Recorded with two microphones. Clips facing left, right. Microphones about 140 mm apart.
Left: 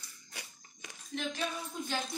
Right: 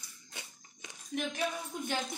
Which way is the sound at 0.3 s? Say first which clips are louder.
Even; 20° right (ahead or behind).